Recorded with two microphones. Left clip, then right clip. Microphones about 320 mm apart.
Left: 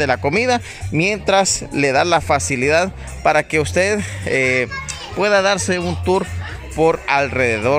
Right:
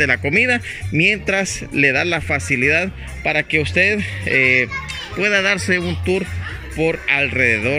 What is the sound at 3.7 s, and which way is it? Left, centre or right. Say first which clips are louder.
Speech: right 1 dB; left.